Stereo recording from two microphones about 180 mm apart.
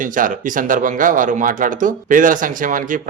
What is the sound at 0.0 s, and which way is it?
Speech, 45° right (ahead or behind).